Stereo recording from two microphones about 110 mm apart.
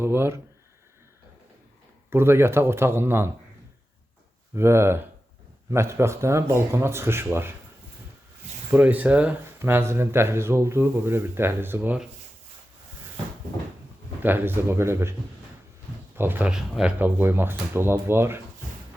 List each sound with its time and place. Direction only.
0.0 s speech: 20° right (ahead or behind)
2.0 s speech: 20° right (ahead or behind)
4.5 s speech: 25° right (ahead or behind)
8.7 s speech: 15° right (ahead or behind)
14.2 s speech: 20° right (ahead or behind)
16.1 s speech: 20° right (ahead or behind)
16.5 s speech: 5° right (ahead or behind)
17.0 s speech: 20° right (ahead or behind)